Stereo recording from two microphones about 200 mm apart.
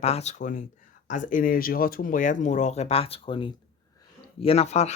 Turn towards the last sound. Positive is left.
turn(degrees=35)  # may be behind; listen again after turning